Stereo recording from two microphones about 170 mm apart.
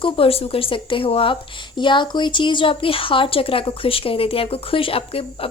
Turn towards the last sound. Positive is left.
turn(degrees=35)  # may be behind; listen again after turning